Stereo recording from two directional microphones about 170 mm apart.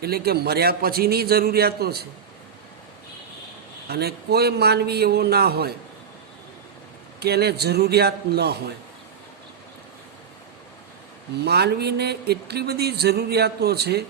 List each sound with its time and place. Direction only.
0.0 s a man's voice: 65° right (ahead or behind)
3.8 s speech: 70° right (ahead or behind)
7.2 s speech: 70° right (ahead or behind)
11.3 s speech: 70° right (ahead or behind)